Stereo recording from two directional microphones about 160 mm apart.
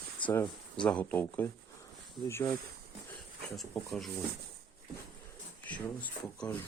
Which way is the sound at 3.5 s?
Centre (ahead or behind).